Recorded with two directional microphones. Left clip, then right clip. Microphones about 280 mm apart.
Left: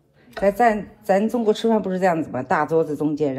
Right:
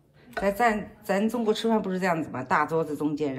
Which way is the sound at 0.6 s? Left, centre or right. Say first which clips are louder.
Left 6 dB; centre.